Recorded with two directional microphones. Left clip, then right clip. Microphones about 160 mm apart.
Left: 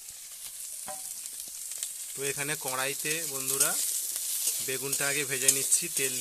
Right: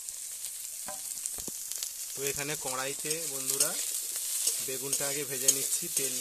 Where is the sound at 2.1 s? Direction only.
Centre (ahead or behind).